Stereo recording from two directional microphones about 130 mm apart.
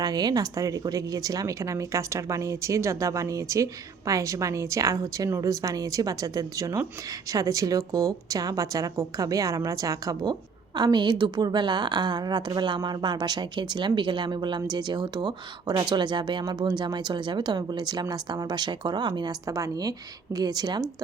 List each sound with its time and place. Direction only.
0.0 s a woman's voice: 30° right (ahead or behind)